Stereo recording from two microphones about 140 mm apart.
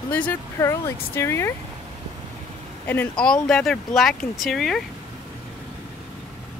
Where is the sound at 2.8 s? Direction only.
15° left (ahead or behind).